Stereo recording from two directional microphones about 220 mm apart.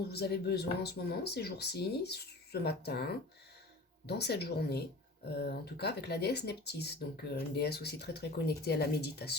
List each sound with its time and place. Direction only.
0.1 s speech: 50° left (ahead or behind)